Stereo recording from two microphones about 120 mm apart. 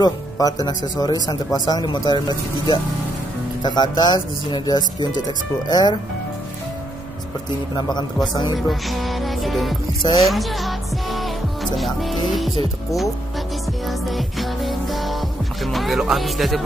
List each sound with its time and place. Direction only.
0.0 s speech: 30° left (ahead or behind)
7.7 s speech: 35° left (ahead or behind)
8.6 s music: centre (ahead or behind)
13.8 s music: centre (ahead or behind)